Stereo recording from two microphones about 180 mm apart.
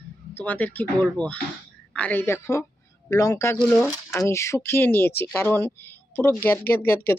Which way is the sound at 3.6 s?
5° left (ahead or behind).